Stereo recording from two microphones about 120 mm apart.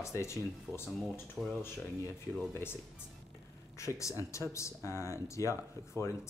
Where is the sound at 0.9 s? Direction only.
Centre (ahead or behind).